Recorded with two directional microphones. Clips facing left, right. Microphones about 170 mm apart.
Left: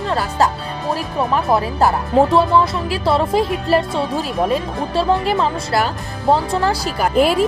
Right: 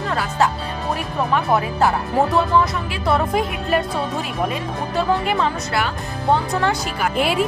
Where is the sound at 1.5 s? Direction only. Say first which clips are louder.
Left 2 dB; 35° left (ahead or behind).